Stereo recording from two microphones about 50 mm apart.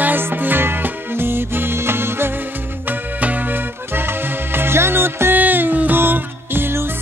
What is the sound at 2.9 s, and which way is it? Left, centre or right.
Music, right.